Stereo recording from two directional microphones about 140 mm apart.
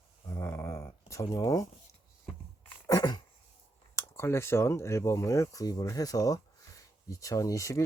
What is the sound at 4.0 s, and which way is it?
Speech, 20° left (ahead or behind).